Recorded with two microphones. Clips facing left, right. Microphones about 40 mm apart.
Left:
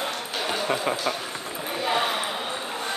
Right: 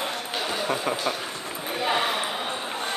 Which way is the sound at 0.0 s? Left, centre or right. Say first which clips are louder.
Even; centre.